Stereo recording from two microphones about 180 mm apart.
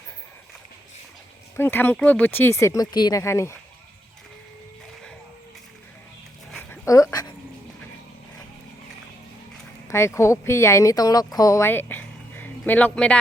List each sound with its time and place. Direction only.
1.5 s speech: 10° left (ahead or behind)
6.5 s dog: 5° left (ahead or behind)
6.8 s dog: 20° left (ahead or behind)
9.9 s speech: 15° left (ahead or behind)